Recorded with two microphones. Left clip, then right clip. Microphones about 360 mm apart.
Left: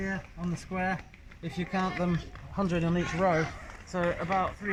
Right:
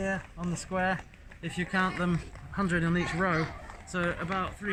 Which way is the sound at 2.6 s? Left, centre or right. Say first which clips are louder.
Right 1 dB; centre.